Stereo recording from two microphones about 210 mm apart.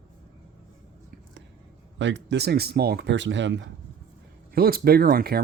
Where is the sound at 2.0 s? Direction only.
60° right (ahead or behind).